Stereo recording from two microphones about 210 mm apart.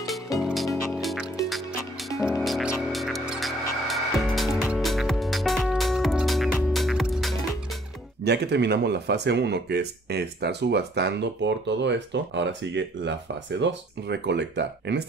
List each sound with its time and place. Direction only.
0.4 s music: centre (ahead or behind)
2.4 s music: centre (ahead or behind)
8.2 s speech: 55° right (ahead or behind)